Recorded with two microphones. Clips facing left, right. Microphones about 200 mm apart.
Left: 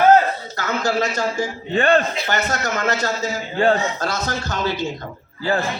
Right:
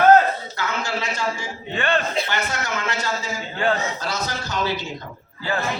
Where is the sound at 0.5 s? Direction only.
45° left (ahead or behind).